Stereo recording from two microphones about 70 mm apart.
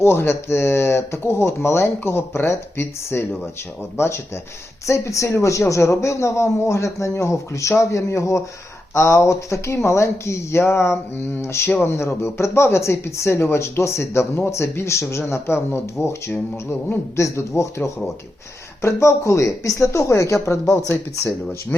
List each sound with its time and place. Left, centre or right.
0.0 s a man's voice: left
17.2 s a man's voice: left
21.7 s a man's voice: left